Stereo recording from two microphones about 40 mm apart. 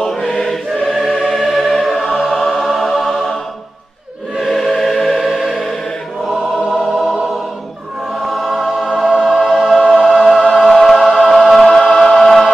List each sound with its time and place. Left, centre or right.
0.0 s choir: centre
0.8 s choir: centre
1.1 s music: centre
4.4 s choir: centre
6.6 s music: centre
8.1 s choir: centre
10.5 s music: centre
11.1 s choir: centre
11.3 s choir: centre
11.6 s music: centre
12.0 s choir: centre